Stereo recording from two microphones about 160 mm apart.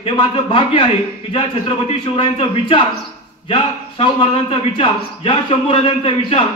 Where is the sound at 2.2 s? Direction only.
35° left (ahead or behind).